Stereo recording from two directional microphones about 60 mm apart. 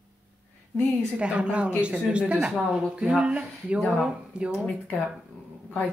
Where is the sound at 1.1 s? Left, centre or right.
Centre.